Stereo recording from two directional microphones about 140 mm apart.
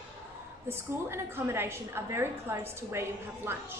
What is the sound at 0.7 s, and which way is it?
A woman's voice, 15° right (ahead or behind).